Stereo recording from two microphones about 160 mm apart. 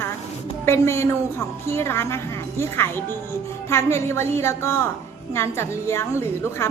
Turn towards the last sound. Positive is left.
turn(degrees=15)  # may be behind; listen again after turning